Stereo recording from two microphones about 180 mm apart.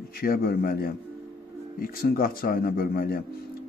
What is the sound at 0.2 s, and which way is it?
A man's voice, 55° left (ahead or behind).